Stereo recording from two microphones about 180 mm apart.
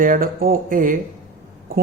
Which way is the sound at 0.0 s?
50° right (ahead or behind).